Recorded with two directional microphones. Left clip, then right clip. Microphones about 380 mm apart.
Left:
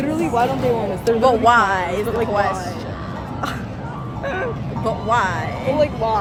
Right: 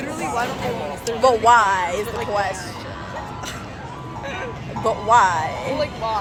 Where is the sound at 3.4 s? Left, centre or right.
Centre.